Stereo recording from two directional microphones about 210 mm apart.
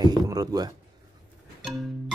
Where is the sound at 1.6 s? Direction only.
Centre (ahead or behind).